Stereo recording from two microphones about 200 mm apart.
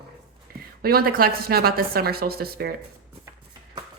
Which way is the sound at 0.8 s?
50° right (ahead or behind).